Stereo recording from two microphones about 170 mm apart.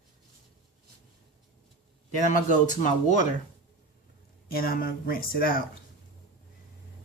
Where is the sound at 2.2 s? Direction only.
45° left (ahead or behind).